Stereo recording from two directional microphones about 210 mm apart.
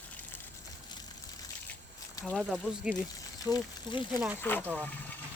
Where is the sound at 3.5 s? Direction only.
20° left (ahead or behind).